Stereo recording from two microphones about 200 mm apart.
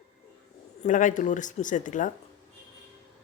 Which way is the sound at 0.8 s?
40° left (ahead or behind).